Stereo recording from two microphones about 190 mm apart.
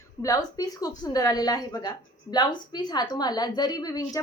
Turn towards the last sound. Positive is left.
turn(degrees=20)  # may be behind; listen again after turning